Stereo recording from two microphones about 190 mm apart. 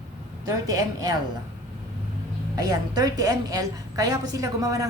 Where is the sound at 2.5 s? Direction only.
20° right (ahead or behind).